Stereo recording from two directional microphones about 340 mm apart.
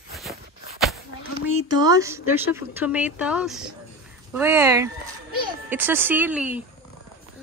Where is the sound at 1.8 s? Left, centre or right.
Centre.